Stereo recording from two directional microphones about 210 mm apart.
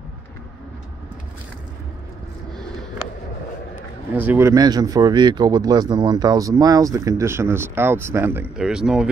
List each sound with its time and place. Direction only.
4.1 s speech: 10° right (ahead or behind)